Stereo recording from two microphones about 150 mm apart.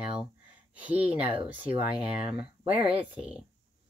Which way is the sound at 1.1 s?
40° right (ahead or behind).